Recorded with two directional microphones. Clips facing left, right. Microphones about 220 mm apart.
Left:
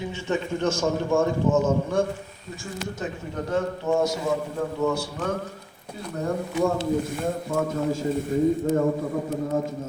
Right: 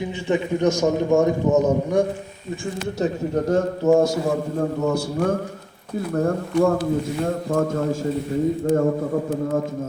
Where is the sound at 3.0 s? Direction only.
40° right (ahead or behind).